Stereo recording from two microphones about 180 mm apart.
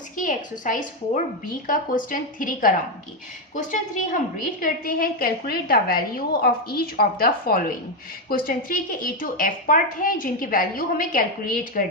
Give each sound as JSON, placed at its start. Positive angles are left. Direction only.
{"t": 0.2, "sound": "a woman's voice", "side_deg": 45}